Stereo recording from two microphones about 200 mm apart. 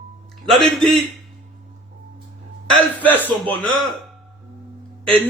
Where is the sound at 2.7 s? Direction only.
10° left (ahead or behind).